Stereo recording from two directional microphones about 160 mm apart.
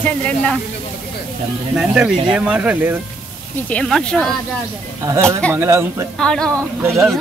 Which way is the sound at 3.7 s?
5° left (ahead or behind).